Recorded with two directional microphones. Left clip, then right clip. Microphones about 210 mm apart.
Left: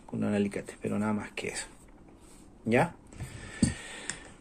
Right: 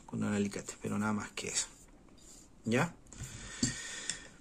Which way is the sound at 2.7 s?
35° right (ahead or behind).